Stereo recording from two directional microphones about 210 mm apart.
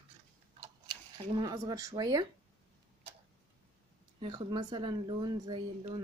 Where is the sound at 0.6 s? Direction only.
20° right (ahead or behind).